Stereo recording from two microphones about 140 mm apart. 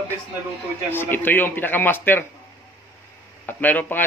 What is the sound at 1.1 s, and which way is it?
A man's voice, 15° left (ahead or behind).